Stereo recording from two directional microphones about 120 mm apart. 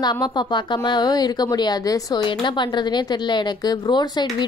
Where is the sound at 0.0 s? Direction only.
35° left (ahead or behind).